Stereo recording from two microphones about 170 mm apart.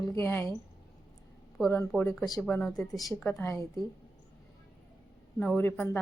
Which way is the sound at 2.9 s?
20° left (ahead or behind).